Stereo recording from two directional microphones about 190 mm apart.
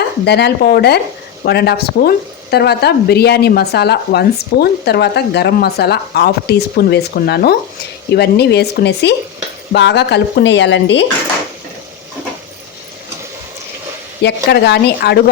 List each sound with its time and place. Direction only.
0.3 s speech: 60° left (ahead or behind)
14.2 s speech: 60° left (ahead or behind)